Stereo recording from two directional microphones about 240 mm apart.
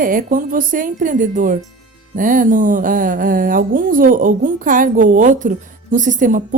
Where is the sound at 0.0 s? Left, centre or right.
Right.